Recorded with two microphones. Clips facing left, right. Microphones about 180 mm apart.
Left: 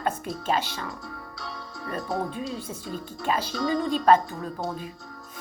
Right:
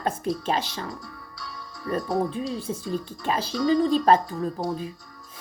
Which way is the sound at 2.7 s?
30° right (ahead or behind).